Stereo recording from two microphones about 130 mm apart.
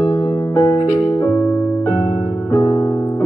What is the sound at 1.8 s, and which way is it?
Music, 30° left (ahead or behind).